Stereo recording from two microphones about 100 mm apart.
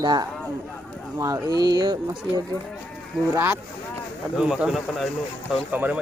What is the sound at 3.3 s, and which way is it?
Speech, 25° right (ahead or behind).